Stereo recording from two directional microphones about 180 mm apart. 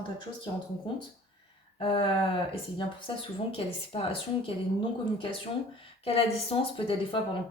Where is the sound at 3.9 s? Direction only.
30° left (ahead or behind).